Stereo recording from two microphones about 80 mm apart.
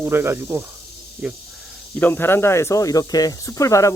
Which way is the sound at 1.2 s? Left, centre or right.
Centre.